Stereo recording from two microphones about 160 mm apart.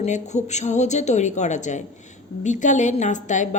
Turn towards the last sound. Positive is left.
turn(degrees=50)  # may be behind; listen again after turning